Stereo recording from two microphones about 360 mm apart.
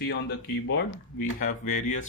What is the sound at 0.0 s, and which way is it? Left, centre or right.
Speech, left.